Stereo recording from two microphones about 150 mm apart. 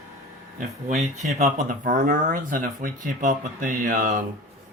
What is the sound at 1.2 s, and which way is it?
Speech, 55° right (ahead or behind).